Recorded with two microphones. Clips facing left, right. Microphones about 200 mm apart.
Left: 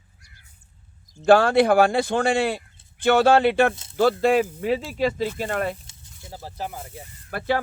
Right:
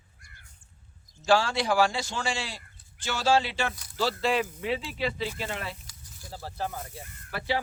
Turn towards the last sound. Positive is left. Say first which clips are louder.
# left 5 dB
turn(degrees=50)  # may be behind; listen again after turning